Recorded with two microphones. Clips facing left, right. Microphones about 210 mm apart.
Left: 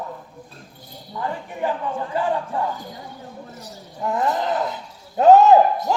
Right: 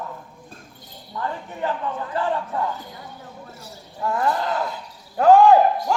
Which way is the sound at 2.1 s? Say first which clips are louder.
Left 1 dB; 15° left (ahead or behind).